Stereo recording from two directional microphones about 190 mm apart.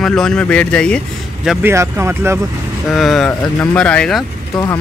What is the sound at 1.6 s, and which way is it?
Speech, 15° right (ahead or behind).